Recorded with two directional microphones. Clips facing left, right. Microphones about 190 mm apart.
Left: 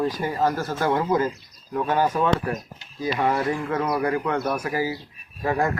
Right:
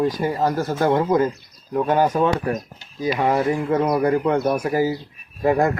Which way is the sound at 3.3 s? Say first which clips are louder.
Right 7 dB; 20° right (ahead or behind).